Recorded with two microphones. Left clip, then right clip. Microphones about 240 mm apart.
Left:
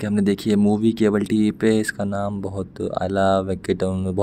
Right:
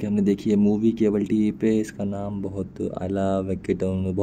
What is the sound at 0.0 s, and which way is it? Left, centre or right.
Speech, left.